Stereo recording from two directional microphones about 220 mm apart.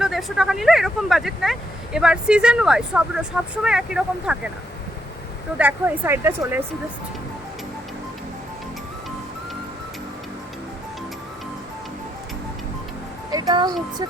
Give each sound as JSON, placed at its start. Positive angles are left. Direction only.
{"t": 0.0, "sound": "speech", "side_deg": 0}
{"t": 5.5, "sound": "speech", "side_deg": -5}
{"t": 13.3, "sound": "music", "side_deg": -20}